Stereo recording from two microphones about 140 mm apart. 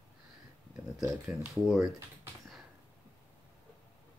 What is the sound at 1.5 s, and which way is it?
Speech, centre (ahead or behind).